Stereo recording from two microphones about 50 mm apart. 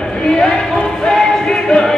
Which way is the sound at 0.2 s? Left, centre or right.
Centre.